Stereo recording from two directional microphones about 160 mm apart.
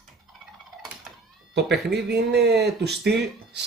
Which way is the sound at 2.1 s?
90° right.